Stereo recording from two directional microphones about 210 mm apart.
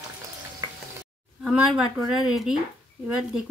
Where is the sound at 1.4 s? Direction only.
5° right (ahead or behind).